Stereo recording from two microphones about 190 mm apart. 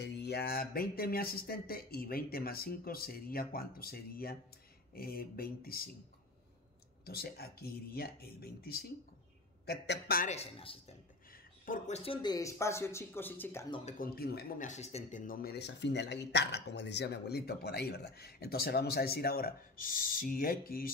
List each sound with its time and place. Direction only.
0.0 s speech: 60° left (ahead or behind)
7.1 s speech: 55° left (ahead or behind)
10.3 s a man's voice: 30° left (ahead or behind)
11.6 s speech: 40° left (ahead or behind); by 13.7 s 10° left (ahead or behind)
13.8 s speech: 45° left (ahead or behind)
14.7 s speech: 35° left (ahead or behind); by 20.9 s 50° left (ahead or behind)